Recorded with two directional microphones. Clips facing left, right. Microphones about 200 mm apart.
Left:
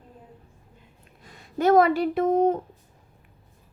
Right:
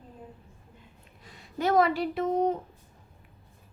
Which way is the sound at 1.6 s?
50° left (ahead or behind).